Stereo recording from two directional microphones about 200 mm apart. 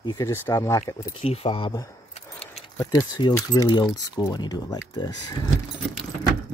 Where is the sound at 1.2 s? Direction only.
30° left (ahead or behind).